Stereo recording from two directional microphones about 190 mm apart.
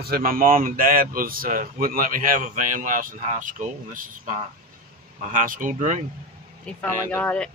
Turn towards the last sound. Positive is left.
turn(degrees=5)  # may be behind; listen again after turning